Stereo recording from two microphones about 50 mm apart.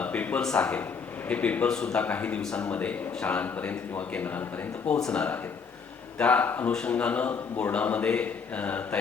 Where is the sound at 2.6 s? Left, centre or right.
Left.